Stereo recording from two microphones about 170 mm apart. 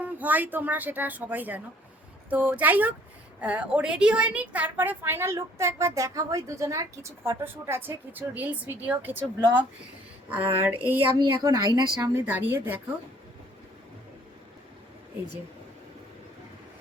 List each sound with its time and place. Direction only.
0.0 s a woman's voice: 10° right (ahead or behind)
11.3 s a woman's voice: 20° right (ahead or behind)